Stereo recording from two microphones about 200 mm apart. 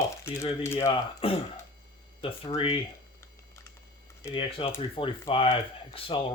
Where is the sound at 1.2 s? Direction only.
30° left (ahead or behind).